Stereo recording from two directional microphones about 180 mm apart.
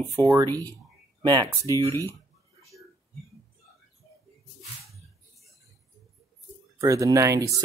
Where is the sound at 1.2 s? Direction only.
25° right (ahead or behind).